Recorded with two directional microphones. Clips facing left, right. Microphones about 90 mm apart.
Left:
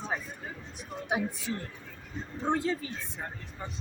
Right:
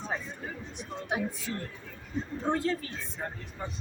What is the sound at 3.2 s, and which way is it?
Speech, 5° left (ahead or behind).